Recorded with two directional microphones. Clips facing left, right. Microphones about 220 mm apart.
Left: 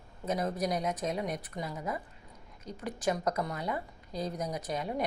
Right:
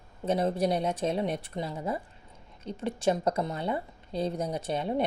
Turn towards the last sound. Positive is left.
turn(degrees=-30)  # may be behind; listen again after turning